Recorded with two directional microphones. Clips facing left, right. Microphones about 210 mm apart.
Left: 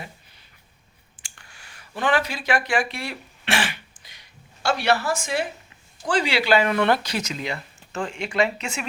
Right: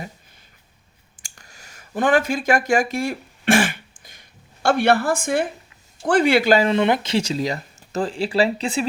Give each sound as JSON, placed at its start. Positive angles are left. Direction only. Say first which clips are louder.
{"t": 1.2, "sound": "a sound", "louder": "right 3 dB", "side_deg": -40}
{"t": 6.1, "sound": "speech", "louder": "right 5 dB", "side_deg": -55}
{"t": 6.7, "sound": "speech", "louder": "right 3 dB", "side_deg": -20}